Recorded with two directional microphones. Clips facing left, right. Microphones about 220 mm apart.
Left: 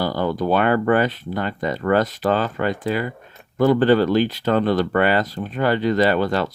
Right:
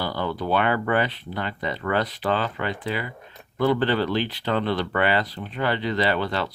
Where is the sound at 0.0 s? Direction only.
45° left (ahead or behind).